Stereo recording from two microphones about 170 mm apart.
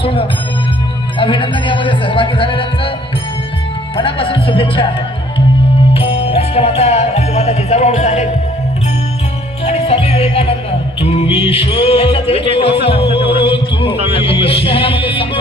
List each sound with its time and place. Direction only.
0.0 s music: 30° left (ahead or behind)
1.2 s speech: 30° left (ahead or behind)
3.9 s speech: 30° left (ahead or behind)
5.9 s music: 35° left (ahead or behind)
9.6 s music: 35° left (ahead or behind)
11.0 s speech: 35° left (ahead or behind)
13.4 s music: 30° left (ahead or behind)